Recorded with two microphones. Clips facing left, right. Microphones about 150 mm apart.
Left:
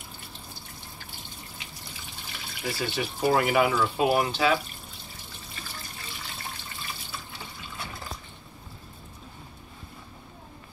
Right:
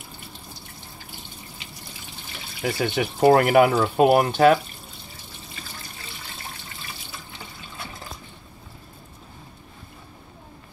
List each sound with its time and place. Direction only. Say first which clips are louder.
2.6 s speech: right 6 dB; 60° right (ahead or behind)